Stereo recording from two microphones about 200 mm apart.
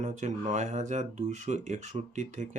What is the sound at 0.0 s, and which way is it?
Speech, 35° right (ahead or behind).